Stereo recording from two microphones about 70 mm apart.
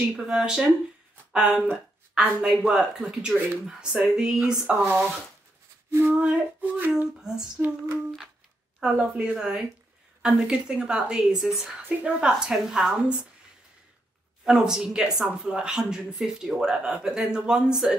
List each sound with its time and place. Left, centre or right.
0.0 s speech: centre
5.9 s female singing: right
6.1 s female singing: centre
7.2 s speech: centre
8.7 s speech: centre
14.4 s speech: centre